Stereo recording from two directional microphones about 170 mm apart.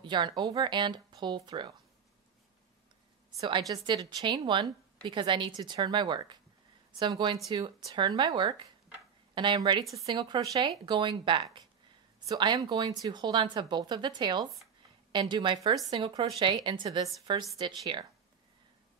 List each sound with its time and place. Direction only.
0.0 s a woman's voice: 25° right (ahead or behind)
3.3 s a woman's voice: 25° right (ahead or behind)